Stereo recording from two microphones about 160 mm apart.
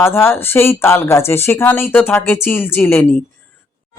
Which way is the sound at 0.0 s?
15° left (ahead or behind).